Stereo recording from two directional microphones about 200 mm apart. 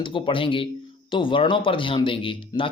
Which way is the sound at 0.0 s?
25° left (ahead or behind).